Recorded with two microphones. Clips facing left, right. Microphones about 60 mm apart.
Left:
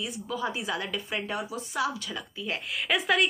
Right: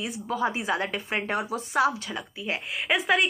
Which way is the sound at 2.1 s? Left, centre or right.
Centre.